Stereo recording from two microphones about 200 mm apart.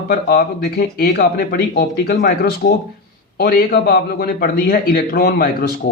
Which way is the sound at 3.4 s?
50° left (ahead or behind).